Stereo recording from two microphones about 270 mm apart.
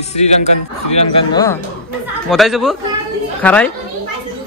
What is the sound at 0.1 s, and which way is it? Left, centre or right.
Speech, left.